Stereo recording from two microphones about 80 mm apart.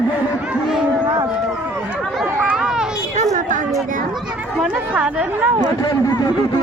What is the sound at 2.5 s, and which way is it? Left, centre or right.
Children playing, centre.